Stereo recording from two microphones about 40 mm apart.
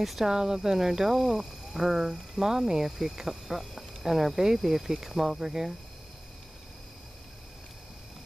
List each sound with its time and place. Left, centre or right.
0.2 s speech: centre